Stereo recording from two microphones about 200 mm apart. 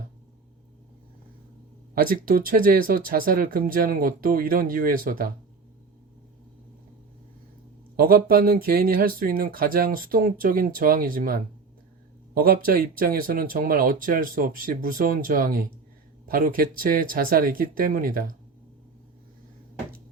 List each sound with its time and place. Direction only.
2.0 s speech: 45° right (ahead or behind)
7.9 s speech: 45° right (ahead or behind)